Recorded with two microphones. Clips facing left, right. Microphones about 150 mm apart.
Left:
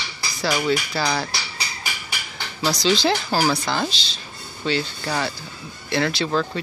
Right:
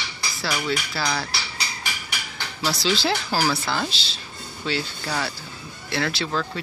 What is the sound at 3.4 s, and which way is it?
Speech, 15° left (ahead or behind).